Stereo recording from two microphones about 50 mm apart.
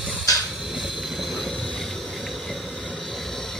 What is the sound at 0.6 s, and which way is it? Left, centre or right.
Train, centre.